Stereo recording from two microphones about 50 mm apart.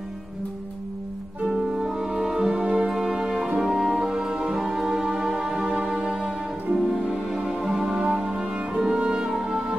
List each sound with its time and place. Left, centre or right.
1.5 s music: centre
2.6 s brass instrument: centre
3.5 s music: centre